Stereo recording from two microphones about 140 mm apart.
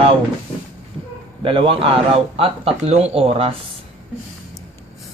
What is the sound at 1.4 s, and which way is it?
A man's voice, 40° right (ahead or behind).